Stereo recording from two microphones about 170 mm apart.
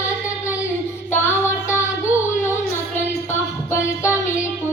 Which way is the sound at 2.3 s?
15° left (ahead or behind).